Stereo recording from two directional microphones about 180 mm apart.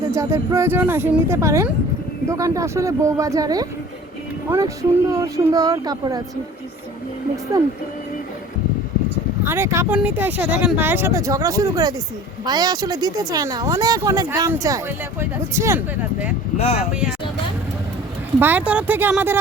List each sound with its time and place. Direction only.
0.1 s speech: 15° right (ahead or behind)
7.5 s speech: 20° right (ahead or behind)
9.5 s speech: 15° right (ahead or behind)
16.6 s speech: 35° left (ahead or behind)
16.9 s speech: 5° right (ahead or behind)
18.3 s speech: 10° right (ahead or behind)